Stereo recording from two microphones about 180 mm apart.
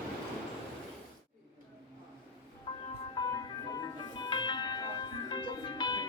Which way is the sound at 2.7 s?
30° left (ahead or behind).